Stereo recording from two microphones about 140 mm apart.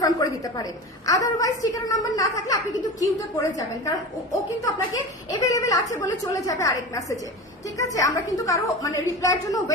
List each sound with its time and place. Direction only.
0.0 s a woman's voice: 25° left (ahead or behind)
5.3 s a sound: 25° left (ahead or behind)
5.9 s a woman's voice: 25° left (ahead or behind)